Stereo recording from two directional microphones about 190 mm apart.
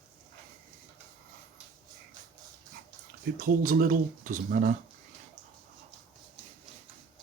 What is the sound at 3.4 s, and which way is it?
Speech, 50° right (ahead or behind).